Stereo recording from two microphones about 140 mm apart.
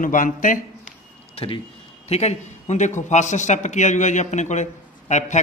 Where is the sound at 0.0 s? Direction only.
70° left (ahead or behind).